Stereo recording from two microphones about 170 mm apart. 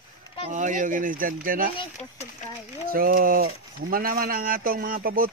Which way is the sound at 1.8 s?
40° left (ahead or behind).